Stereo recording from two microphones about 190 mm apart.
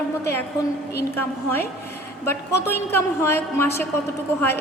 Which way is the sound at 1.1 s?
10° left (ahead or behind).